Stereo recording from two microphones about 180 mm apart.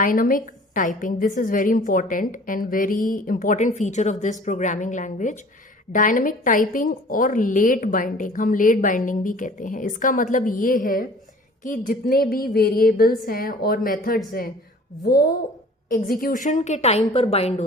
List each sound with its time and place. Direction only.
0.0 s a woman's voice: 50° left (ahead or behind); by 17.5 s 30° left (ahead or behind)